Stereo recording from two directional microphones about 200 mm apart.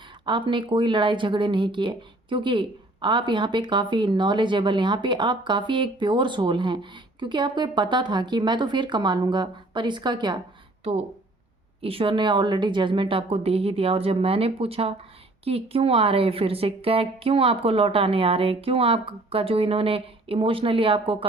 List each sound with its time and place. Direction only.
0.3 s speech: 25° right (ahead or behind)
11.8 s speech: 30° right (ahead or behind)